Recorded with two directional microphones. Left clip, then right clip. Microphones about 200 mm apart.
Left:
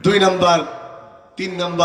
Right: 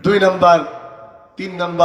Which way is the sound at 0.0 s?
50° left (ahead or behind).